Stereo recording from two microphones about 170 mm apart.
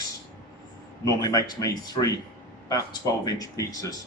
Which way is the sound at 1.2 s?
20° left (ahead or behind).